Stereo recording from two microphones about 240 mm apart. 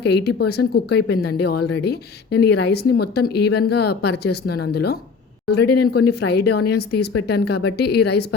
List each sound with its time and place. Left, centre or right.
0.0 s a woman's voice: left